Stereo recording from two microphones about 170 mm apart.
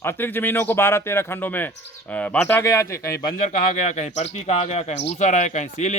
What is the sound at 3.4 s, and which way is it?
A man's voice, 45° left (ahead or behind).